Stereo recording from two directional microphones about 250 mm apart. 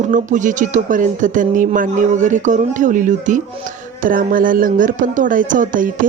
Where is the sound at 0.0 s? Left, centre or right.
Right.